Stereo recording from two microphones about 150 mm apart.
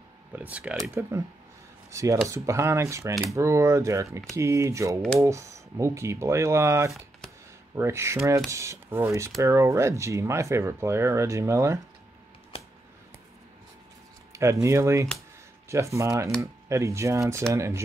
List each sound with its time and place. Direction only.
0.3 s speech: 10° right (ahead or behind)
1.9 s speech: 20° right (ahead or behind)
14.3 s speech: 20° right (ahead or behind)